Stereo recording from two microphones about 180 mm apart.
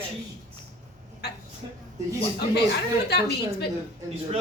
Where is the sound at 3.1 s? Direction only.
65° left (ahead or behind).